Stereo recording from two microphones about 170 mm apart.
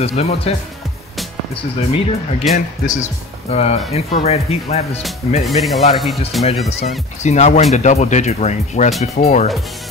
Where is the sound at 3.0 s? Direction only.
40° left (ahead or behind).